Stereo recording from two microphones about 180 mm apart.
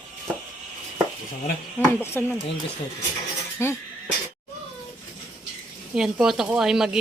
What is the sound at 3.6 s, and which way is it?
Speech, 15° left (ahead or behind).